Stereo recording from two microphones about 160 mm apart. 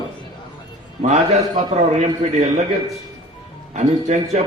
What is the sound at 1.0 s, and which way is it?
A man's voice, 45° right (ahead or behind).